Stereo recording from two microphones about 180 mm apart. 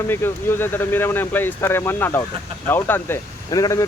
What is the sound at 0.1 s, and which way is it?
Speech, 10° left (ahead or behind).